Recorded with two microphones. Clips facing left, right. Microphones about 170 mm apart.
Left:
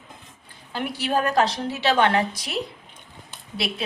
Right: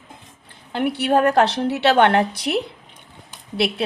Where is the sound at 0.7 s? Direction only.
60° right (ahead or behind).